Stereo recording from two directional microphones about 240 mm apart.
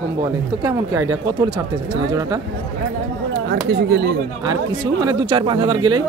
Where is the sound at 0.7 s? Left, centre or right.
Centre.